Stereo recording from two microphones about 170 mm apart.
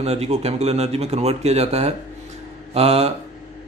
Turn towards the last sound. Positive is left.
turn(degrees=-35)  # may be behind; listen again after turning